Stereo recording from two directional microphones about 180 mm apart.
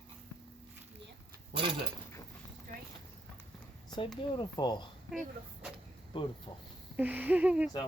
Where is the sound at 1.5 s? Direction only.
30° right (ahead or behind).